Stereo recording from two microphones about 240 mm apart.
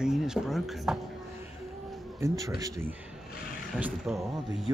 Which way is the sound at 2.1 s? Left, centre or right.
Centre.